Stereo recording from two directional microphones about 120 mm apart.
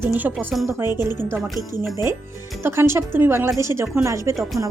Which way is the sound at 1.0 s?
20° right (ahead or behind).